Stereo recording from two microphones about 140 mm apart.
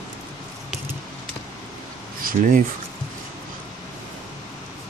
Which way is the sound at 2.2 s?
90° right.